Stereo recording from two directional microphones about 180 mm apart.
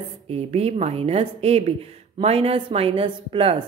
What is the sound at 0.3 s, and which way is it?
A woman's voice, 35° right (ahead or behind).